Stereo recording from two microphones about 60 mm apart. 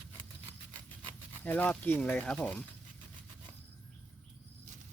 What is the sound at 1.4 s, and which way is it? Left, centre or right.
Speech, left.